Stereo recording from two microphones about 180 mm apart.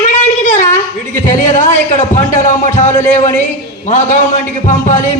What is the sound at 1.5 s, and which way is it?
Speech, 40° left (ahead or behind).